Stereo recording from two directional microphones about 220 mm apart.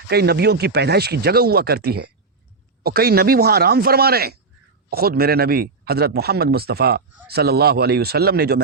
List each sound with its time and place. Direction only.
0.1 s a man's voice: 45° right (ahead or behind)